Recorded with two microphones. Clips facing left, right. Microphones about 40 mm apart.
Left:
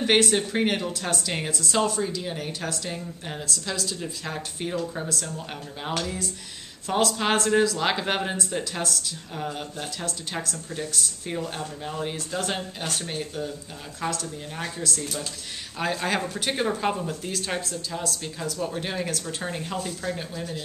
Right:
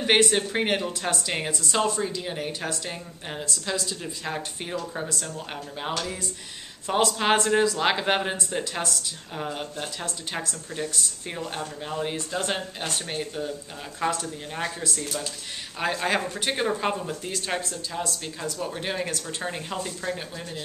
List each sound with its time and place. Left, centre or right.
0.0 s speech: centre